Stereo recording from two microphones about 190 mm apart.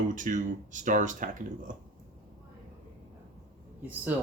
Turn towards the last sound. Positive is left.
turn(degrees=-10)  # may be behind; listen again after turning